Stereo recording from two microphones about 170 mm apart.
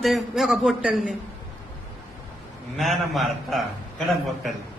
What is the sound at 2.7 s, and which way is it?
Speech, centre (ahead or behind).